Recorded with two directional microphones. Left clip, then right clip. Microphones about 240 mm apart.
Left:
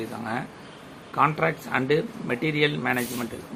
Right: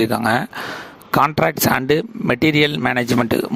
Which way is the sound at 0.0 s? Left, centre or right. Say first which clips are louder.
Right 14 dB; right.